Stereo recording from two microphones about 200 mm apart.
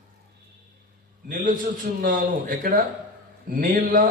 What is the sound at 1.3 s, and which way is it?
A man's voice, 45° right (ahead or behind).